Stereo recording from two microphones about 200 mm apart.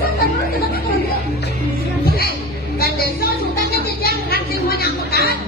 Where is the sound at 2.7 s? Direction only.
50° left (ahead or behind).